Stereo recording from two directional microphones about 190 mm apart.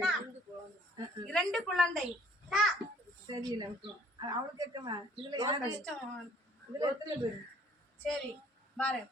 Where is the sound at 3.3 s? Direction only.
20° right (ahead or behind).